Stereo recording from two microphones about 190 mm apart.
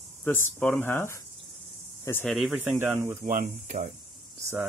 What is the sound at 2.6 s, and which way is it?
Speech, 10° right (ahead or behind).